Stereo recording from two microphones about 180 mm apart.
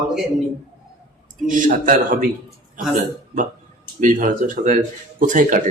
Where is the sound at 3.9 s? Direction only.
50° right (ahead or behind).